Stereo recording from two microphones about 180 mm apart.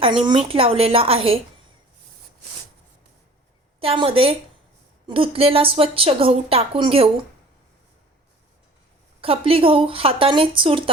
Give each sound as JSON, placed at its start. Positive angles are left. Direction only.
{"t": 0.0, "sound": "a woman's voice", "side_deg": -30}
{"t": 3.8, "sound": "a woman's voice", "side_deg": -30}
{"t": 9.2, "sound": "speech", "side_deg": -30}